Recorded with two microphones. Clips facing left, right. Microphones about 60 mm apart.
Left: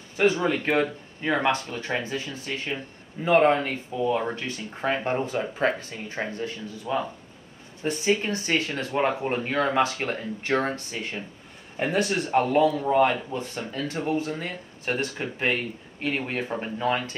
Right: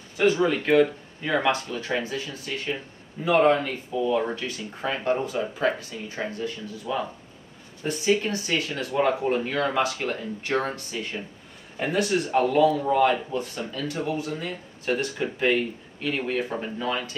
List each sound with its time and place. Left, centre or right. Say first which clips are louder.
0.2 s speech: right 1 dB; left
16.8 s speech: left 4 dB; left